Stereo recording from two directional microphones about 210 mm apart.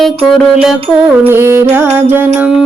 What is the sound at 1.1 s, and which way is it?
Music, 10° right (ahead or behind).